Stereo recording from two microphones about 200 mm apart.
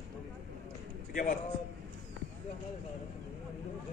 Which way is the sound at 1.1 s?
45° left (ahead or behind).